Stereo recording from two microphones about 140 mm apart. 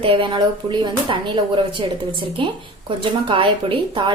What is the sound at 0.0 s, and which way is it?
A woman's voice, 35° right (ahead or behind).